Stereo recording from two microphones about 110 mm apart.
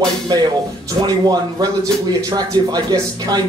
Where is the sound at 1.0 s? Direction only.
40° right (ahead or behind).